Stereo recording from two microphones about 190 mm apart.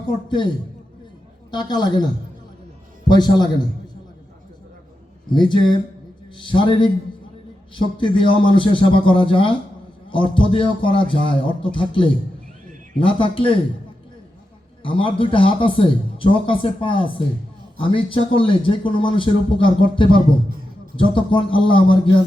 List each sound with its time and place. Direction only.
1.5 s a man's voice: 20° left (ahead or behind)
3.1 s a man's voice: 20° left (ahead or behind)
5.3 s a man's voice: 25° left (ahead or behind)
14.8 s a man's voice: 25° left (ahead or behind)